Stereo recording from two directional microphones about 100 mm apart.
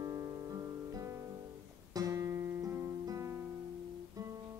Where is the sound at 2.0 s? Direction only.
30° right (ahead or behind).